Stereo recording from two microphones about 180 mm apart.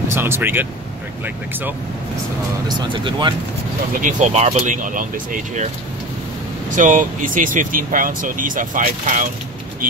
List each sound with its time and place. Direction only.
0.1 s speech: 15° right (ahead or behind)
2.8 s speech: 25° right (ahead or behind)
4.0 s speech: 40° right (ahead or behind)
6.7 s speech: 45° right (ahead or behind)